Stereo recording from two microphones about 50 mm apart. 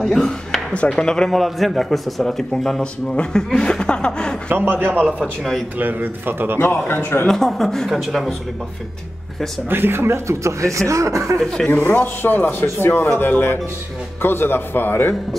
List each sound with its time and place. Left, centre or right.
0.0 s a sound: centre
0.8 s chuckle: centre
1.3 s a man's voice: centre
3.5 s chuckle: centre
4.5 s a man's voice: right
6.9 s speech: left
7.2 s a man's voice: centre
9.7 s speech: right
11.7 s speech: left
12.6 s speech: left